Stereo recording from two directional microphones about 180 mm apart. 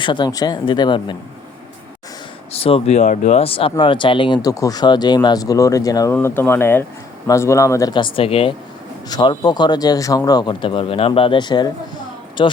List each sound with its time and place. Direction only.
0.0 s speech: 25° left (ahead or behind)
2.5 s speech: 30° left (ahead or behind)